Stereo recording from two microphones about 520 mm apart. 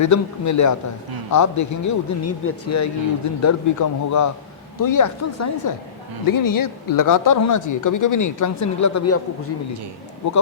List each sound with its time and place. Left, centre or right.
0.0 s speech: left